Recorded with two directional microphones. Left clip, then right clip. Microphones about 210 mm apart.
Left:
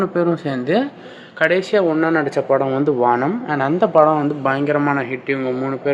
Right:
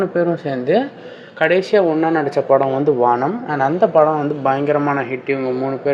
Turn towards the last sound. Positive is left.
turn(degrees=10)  # may be behind; listen again after turning